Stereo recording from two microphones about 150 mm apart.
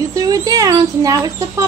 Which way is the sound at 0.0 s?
25° right (ahead or behind).